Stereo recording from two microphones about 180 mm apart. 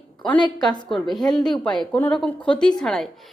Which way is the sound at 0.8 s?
Centre (ahead or behind).